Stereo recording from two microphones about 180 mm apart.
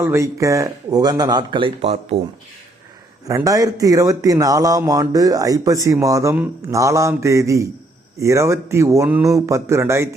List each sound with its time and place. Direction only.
0.0 s speech: 15° right (ahead or behind); by 2.1 s 35° right (ahead or behind)
3.2 s speech: 20° right (ahead or behind)